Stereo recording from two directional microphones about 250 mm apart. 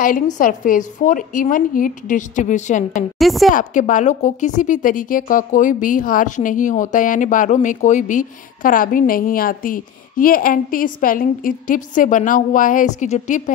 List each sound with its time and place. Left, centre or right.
0.4 s speech: left
3.2 s a woman's voice: centre
3.5 s speech: left